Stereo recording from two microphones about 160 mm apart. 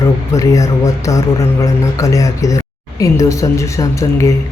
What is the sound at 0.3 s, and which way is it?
Speech, 20° left (ahead or behind).